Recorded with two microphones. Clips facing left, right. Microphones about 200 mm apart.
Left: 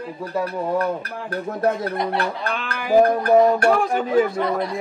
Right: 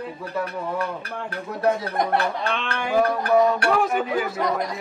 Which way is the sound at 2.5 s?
Centre (ahead or behind).